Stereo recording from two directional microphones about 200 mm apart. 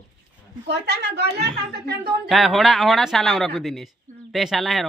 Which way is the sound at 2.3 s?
Centre (ahead or behind).